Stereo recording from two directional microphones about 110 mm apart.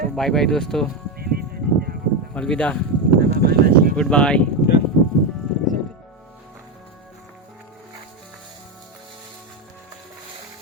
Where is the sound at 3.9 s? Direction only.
10° left (ahead or behind).